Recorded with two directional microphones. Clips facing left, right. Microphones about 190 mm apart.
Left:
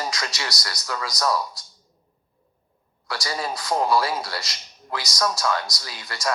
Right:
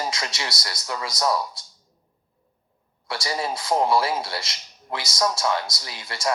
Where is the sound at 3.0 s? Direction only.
25° right (ahead or behind).